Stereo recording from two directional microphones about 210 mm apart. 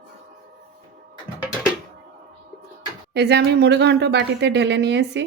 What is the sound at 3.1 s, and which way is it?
A woman's voice, 50° right (ahead or behind).